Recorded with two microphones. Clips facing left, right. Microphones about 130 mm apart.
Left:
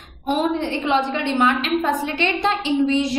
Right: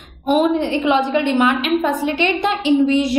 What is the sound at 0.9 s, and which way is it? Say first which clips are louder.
A woman's voice: right 2 dB; 15° right (ahead or behind).